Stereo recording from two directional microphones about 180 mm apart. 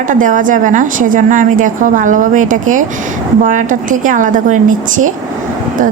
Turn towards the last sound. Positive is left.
turn(degrees=-45)  # may be behind; listen again after turning